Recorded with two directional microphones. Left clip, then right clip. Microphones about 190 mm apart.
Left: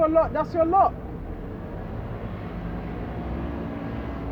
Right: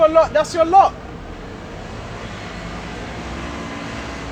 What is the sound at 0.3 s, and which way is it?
Speech, 35° right (ahead or behind).